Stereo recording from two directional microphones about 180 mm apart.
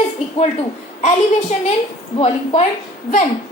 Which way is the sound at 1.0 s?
40° left (ahead or behind).